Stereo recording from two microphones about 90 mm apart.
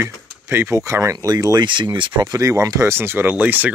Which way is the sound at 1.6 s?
60° right (ahead or behind).